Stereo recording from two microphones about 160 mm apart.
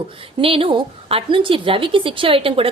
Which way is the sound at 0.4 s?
35° right (ahead or behind).